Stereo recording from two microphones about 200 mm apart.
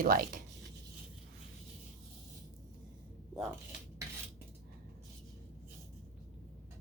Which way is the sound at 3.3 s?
Centre (ahead or behind).